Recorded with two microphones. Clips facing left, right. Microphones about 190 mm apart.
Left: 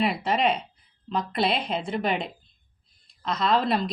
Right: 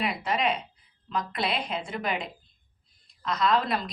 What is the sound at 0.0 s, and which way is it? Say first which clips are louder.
A woman's voice: left 4 dB; 30° left (ahead or behind).